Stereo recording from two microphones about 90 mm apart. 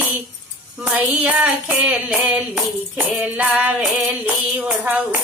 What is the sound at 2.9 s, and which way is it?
Music, 15° right (ahead or behind).